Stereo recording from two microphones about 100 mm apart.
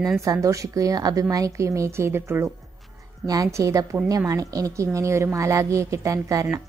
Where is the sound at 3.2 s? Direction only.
35° right (ahead or behind).